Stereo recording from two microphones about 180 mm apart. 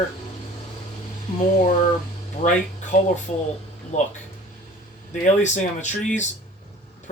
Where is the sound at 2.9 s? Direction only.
45° left (ahead or behind).